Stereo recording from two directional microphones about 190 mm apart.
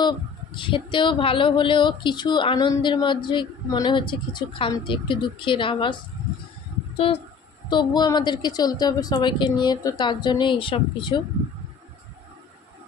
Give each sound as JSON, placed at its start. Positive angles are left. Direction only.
{"t": 0.6, "sound": "a woman's voice", "side_deg": 25}
{"t": 7.7, "sound": "a woman's voice", "side_deg": 20}